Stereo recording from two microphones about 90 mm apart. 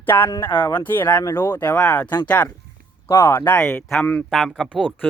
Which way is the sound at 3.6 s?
10° left (ahead or behind).